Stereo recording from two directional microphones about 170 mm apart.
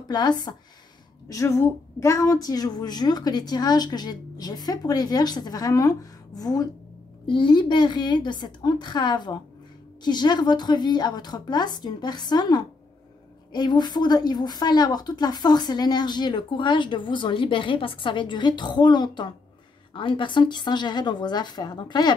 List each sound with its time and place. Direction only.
0.1 s speech: 25° left (ahead or behind)